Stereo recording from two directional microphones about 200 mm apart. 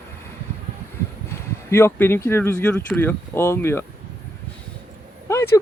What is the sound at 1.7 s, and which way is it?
Speech, 10° left (ahead or behind).